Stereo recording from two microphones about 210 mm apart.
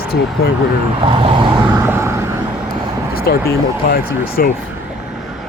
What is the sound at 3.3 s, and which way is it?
Speech, 50° left (ahead or behind).